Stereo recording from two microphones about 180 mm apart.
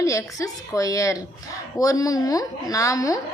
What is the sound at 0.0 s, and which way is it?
A woman's voice, 15° left (ahead or behind).